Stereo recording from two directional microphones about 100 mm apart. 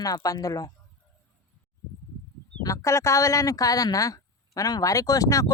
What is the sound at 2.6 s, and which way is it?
Speech, 30° left (ahead or behind).